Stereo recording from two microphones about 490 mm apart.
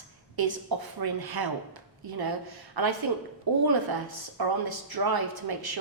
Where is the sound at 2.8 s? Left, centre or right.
Right.